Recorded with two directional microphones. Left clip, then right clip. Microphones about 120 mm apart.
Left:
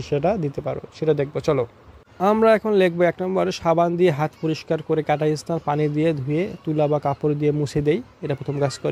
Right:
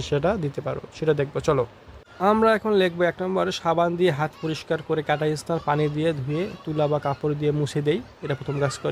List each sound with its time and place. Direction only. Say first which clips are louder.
0.1 s speech: left 2 dB; 15° left (ahead or behind)
2.4 s speech: left 3 dB; 35° left (ahead or behind)